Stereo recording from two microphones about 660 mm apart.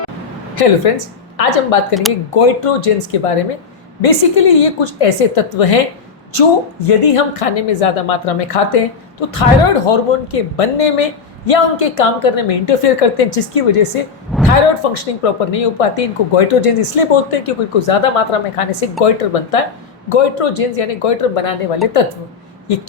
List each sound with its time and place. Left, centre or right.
0.5 s a woman's voice: left
14.3 s a sound: centre
14.9 s a woman's voice: left